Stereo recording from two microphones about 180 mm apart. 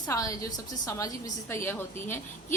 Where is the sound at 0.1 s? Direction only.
20° left (ahead or behind).